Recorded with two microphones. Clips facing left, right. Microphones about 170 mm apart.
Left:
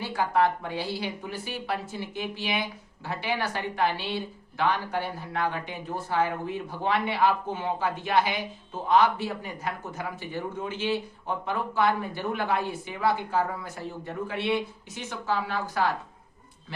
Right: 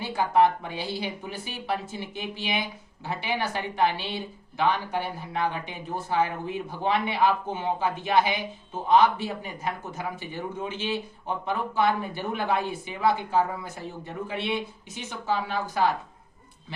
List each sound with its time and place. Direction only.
0.0 s speech: 20° right (ahead or behind)